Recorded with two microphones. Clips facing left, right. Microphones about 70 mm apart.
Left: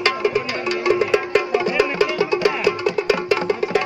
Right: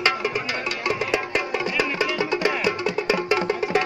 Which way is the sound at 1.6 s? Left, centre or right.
Centre.